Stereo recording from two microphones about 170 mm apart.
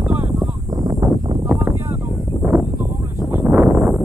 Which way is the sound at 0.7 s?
25° right (ahead or behind).